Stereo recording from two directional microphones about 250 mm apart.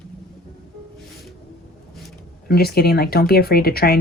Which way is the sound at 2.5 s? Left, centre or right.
Left.